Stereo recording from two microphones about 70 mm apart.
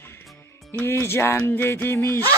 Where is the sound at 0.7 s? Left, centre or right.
Left.